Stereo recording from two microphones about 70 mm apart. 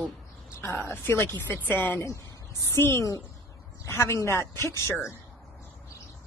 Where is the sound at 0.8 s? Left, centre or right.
Left.